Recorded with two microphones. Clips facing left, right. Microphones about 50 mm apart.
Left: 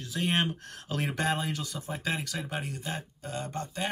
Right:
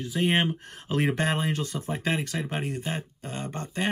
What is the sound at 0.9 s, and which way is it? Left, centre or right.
Speech, right.